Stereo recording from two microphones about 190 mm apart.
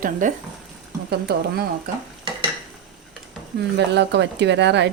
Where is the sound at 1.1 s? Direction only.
55° right (ahead or behind).